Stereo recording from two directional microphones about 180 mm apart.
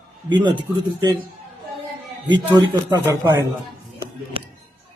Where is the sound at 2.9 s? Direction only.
15° right (ahead or behind).